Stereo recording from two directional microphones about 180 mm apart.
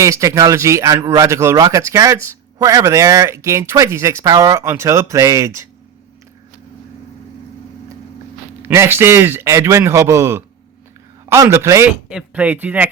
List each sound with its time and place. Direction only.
0.0 s a man's voice: 15° right (ahead or behind)
8.6 s a man's voice: 15° right (ahead or behind)